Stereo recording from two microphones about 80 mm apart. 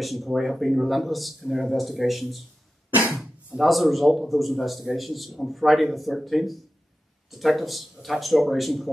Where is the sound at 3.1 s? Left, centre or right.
Centre.